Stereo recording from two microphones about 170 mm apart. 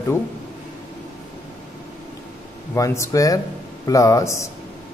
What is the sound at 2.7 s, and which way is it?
Speech, 15° left (ahead or behind).